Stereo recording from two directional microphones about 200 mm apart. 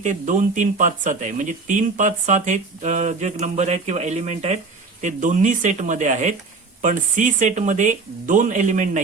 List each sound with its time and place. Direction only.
0.0 s speech: 40° right (ahead or behind)